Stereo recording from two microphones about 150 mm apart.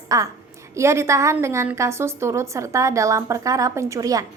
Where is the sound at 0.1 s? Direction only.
20° right (ahead or behind).